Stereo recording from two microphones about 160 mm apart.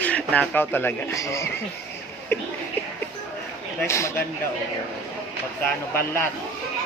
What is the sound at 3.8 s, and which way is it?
Speech, 15° left (ahead or behind).